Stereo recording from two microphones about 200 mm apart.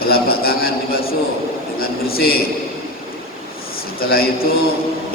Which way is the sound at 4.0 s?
50° left (ahead or behind).